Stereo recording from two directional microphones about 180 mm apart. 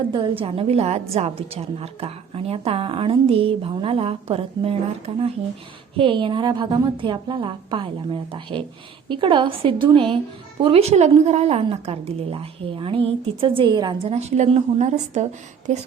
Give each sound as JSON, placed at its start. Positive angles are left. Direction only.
{"t": 0.1, "sound": "a woman's voice", "side_deg": -30}